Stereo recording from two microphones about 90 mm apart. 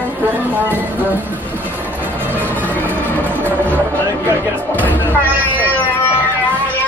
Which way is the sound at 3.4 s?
20° left (ahead or behind).